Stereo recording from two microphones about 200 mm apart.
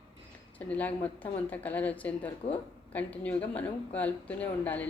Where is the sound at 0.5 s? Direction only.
10° left (ahead or behind).